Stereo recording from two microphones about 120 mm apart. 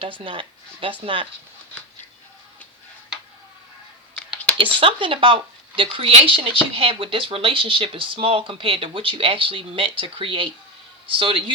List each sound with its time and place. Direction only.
0.0 s speech: 45° right (ahead or behind)
4.5 s speech: 50° right (ahead or behind)